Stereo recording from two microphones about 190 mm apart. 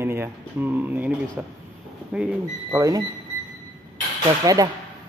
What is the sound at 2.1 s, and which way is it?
Speech, 5° right (ahead or behind).